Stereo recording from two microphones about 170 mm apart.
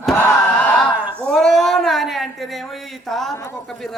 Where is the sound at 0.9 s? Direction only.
10° right (ahead or behind).